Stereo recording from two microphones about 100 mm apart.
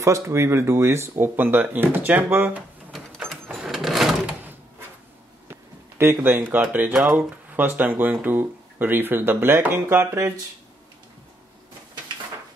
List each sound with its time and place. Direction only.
0.0 s speech: 30° right (ahead or behind)
3.5 s a sound: 5° right (ahead or behind)
5.5 s speech: 25° right (ahead or behind)